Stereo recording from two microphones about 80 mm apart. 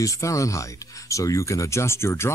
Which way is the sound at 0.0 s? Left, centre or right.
Left.